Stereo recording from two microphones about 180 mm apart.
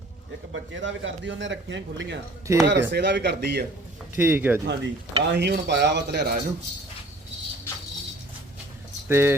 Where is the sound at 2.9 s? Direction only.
75° right (ahead or behind).